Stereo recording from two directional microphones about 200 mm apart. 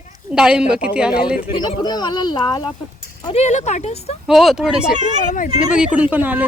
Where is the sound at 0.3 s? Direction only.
5° right (ahead or behind).